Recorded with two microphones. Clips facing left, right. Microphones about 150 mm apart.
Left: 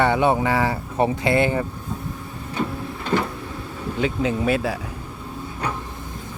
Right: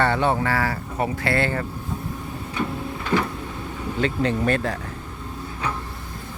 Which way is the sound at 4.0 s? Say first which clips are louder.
Even; 5° left (ahead or behind).